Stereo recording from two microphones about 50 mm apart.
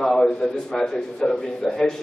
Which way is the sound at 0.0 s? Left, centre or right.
Centre.